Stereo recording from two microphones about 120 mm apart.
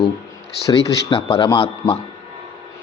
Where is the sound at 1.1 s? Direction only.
50° left (ahead or behind).